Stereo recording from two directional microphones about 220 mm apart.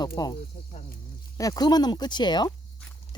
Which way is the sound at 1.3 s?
15° left (ahead or behind).